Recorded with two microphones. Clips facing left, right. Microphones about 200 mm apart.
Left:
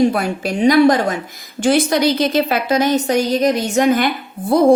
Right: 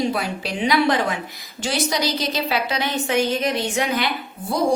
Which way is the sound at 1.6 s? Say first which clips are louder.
Left 9 dB; 55° left (ahead or behind).